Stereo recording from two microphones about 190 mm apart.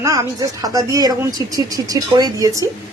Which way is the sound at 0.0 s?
15° right (ahead or behind).